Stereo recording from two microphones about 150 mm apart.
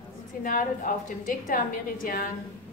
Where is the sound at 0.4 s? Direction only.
65° left (ahead or behind).